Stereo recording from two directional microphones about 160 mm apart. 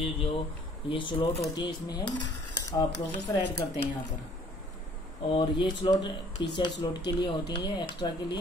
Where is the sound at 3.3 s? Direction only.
20° left (ahead or behind).